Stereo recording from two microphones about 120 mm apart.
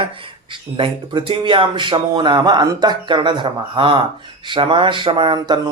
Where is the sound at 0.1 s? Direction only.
45° right (ahead or behind).